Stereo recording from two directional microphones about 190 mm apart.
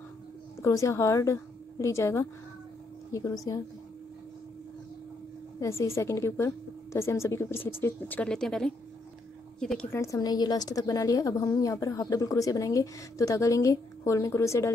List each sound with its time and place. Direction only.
0.6 s a woman's voice: 15° left (ahead or behind)
5.6 s a woman's voice: 15° left (ahead or behind)